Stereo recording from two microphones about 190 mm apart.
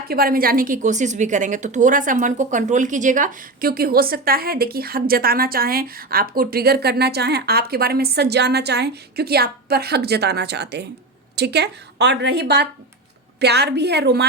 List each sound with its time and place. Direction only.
0.1 s a woman's voice: 50° right (ahead or behind)